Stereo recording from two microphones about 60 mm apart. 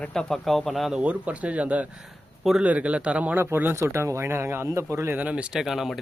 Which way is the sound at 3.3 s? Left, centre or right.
Right.